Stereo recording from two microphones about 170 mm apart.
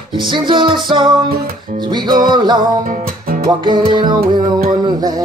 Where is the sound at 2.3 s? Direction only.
25° right (ahead or behind).